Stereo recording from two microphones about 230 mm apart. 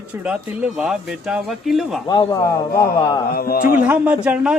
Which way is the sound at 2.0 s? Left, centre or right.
Centre.